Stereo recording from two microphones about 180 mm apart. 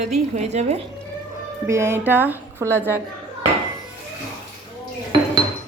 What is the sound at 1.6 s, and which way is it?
A woman's voice, 15° right (ahead or behind).